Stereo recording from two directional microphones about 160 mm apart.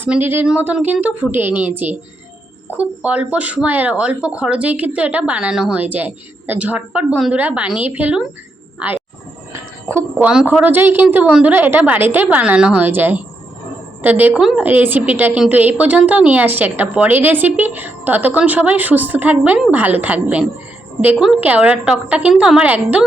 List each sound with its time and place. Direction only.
0.0 s a woman's voice: 10° right (ahead or behind)
9.5 s a woman's voice: 15° right (ahead or behind)